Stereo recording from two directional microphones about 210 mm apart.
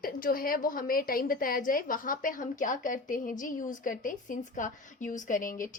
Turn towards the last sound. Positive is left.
turn(degrees=40)  # may be behind; listen again after turning